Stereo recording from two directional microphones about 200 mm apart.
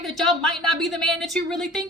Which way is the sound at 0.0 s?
Centre (ahead or behind).